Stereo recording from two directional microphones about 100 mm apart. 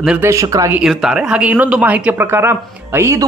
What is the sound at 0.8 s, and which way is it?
Speech, 5° right (ahead or behind).